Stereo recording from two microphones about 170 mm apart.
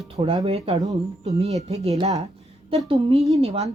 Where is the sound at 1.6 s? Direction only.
40° right (ahead or behind).